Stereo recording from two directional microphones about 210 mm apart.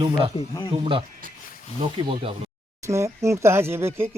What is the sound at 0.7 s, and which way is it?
Speech, 25° right (ahead or behind).